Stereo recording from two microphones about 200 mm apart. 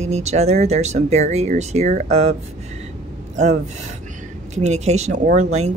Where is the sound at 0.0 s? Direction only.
35° right (ahead or behind).